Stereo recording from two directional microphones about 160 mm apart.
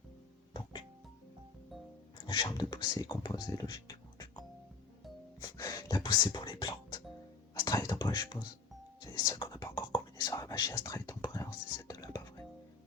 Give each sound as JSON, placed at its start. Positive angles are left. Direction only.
{"t": 2.2, "sound": "speech", "side_deg": 30}
{"t": 5.4, "sound": "music", "side_deg": 25}
{"t": 7.6, "sound": "whispering", "side_deg": 25}